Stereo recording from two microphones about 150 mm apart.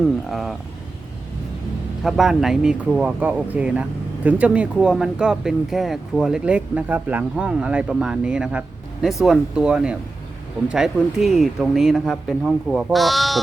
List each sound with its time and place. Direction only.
0.3 s speech: centre (ahead or behind)
2.0 s speech: centre (ahead or behind)